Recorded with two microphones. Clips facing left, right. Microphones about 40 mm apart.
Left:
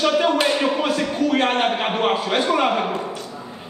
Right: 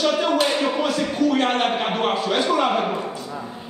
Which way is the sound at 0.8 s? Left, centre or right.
Left.